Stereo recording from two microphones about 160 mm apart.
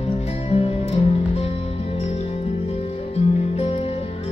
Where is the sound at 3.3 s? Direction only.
40° left (ahead or behind).